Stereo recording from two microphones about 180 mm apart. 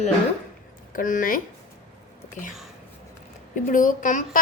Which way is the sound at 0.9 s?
50° left (ahead or behind).